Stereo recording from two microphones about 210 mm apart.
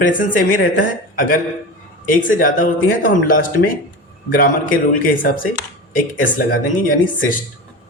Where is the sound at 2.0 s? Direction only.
40° left (ahead or behind).